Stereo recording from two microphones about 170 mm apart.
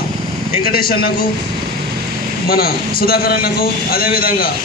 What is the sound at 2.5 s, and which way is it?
A man's voice, 65° left (ahead or behind).